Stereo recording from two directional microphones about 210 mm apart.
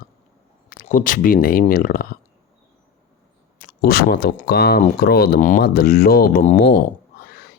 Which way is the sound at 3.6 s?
45° left (ahead or behind).